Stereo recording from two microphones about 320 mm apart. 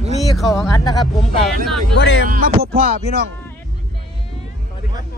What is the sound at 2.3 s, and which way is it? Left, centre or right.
Music, right.